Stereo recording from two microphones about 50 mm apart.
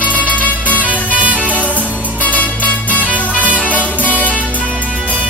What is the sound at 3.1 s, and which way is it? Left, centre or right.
Music, right.